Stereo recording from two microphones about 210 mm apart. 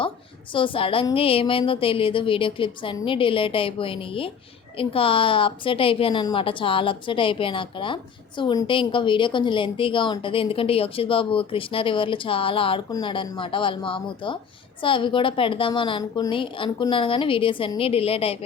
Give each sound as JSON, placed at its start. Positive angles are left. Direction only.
{"t": 0.5, "sound": "a woman's voice", "side_deg": 25}